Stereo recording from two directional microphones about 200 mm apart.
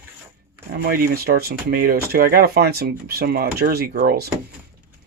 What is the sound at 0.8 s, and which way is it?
Speech, 50° right (ahead or behind).